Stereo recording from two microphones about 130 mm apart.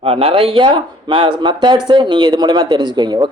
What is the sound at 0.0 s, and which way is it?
Speech, 50° right (ahead or behind).